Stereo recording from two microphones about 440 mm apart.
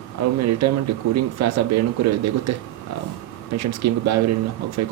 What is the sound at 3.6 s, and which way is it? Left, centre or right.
Speech, right.